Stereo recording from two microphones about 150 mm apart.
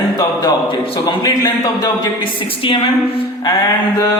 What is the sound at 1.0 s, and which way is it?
Speech, 25° left (ahead or behind).